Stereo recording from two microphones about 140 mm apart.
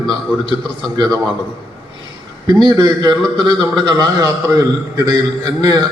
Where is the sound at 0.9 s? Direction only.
30° right (ahead or behind).